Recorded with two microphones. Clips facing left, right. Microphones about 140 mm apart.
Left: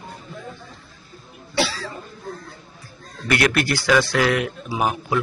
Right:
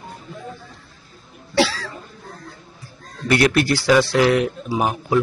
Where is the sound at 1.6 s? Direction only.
90° right.